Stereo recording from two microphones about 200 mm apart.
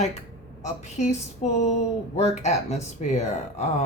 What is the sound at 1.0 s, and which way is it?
Speech, 35° left (ahead or behind).